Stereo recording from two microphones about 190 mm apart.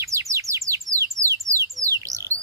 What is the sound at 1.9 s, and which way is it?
Bird, 15° right (ahead or behind).